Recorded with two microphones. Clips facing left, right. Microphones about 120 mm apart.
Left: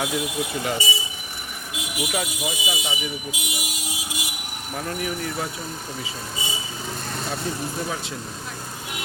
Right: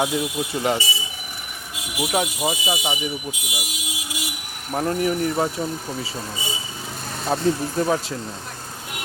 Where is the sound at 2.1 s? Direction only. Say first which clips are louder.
Right 8 dB; 35° right (ahead or behind).